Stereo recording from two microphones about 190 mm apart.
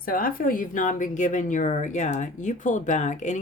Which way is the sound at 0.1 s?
50° left (ahead or behind).